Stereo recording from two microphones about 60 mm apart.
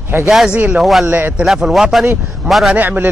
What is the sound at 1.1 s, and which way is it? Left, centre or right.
Speech, right.